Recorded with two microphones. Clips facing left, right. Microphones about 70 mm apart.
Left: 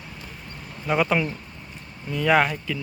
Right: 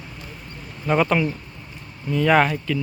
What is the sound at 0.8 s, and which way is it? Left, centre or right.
Speech, centre.